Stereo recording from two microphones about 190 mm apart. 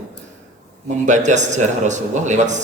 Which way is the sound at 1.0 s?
40° right (ahead or behind).